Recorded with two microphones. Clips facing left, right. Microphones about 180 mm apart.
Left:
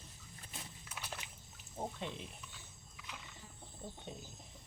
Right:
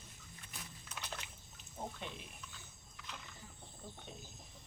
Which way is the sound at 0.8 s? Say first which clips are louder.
Right 1 dB; 10° left (ahead or behind).